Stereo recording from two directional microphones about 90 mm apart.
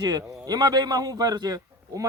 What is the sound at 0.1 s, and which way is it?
A man's voice, 45° right (ahead or behind).